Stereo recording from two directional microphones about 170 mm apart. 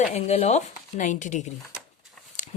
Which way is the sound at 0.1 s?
40° left (ahead or behind).